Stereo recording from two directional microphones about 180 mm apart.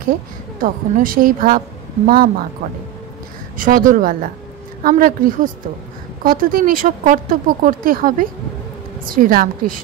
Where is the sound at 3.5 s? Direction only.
50° right (ahead or behind).